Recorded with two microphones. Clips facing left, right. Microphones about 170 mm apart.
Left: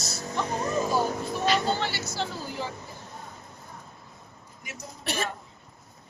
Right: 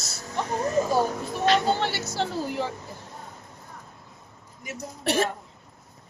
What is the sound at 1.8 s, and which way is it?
Speech, 65° right (ahead or behind).